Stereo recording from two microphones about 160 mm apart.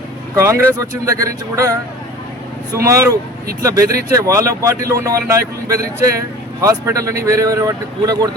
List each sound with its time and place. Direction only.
0.3 s speech: 20° right (ahead or behind)
2.7 s a man's voice: 15° right (ahead or behind)